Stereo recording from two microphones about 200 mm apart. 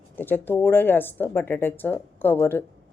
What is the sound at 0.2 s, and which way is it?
Speech, 10° left (ahead or behind).